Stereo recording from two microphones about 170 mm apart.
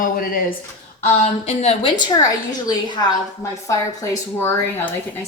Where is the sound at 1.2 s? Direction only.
40° left (ahead or behind).